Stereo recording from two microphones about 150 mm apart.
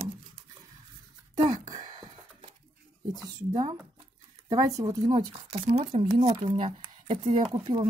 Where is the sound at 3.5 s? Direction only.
20° right (ahead or behind).